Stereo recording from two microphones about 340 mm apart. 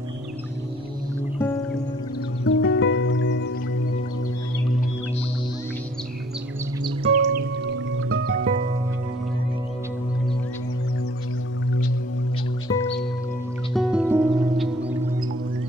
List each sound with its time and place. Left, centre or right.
2.4 s music: left
7.2 s music: right
12.6 s music: centre
13.7 s music: centre